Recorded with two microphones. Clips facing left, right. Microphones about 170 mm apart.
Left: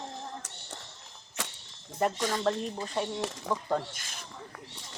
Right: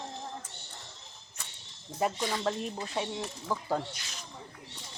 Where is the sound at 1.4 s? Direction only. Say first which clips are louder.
Left 11 dB; 90° left.